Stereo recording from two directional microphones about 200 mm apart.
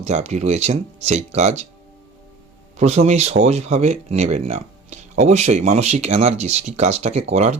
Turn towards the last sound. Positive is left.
turn(degrees=-30)  # may be behind; listen again after turning